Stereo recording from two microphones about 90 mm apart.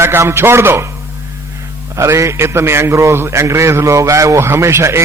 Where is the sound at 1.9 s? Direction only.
35° right (ahead or behind).